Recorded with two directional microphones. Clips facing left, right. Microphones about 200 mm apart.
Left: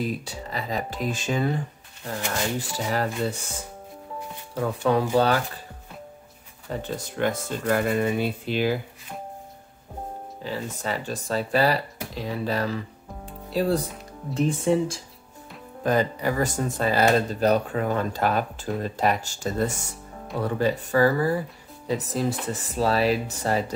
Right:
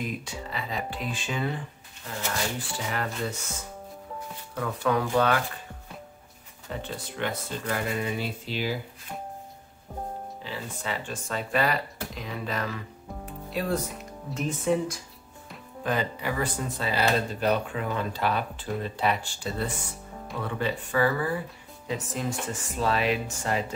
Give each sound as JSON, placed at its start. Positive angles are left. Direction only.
{"t": 0.0, "sound": "speech", "side_deg": 35}
{"t": 2.9, "sound": "speech", "side_deg": 35}
{"t": 4.6, "sound": "speech", "side_deg": 30}
{"t": 6.7, "sound": "speech", "side_deg": 45}
{"t": 10.4, "sound": "speech", "side_deg": 40}
{"t": 15.8, "sound": "speech", "side_deg": 40}